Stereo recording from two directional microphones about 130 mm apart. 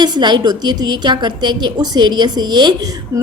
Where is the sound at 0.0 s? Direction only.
35° right (ahead or behind).